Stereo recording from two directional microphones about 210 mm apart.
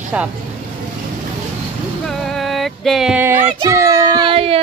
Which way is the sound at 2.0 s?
Centre (ahead or behind).